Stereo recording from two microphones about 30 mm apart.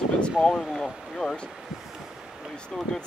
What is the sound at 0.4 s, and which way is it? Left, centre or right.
Speech, centre.